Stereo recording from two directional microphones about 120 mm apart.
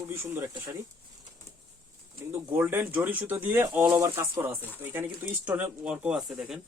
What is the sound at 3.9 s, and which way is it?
Speech, 25° right (ahead or behind).